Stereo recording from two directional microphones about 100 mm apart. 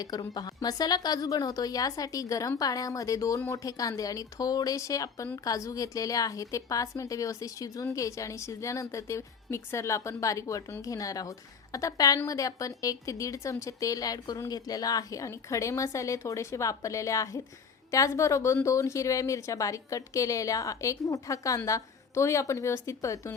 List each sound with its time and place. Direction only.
0.0 s a woman's voice: 40° left (ahead or behind)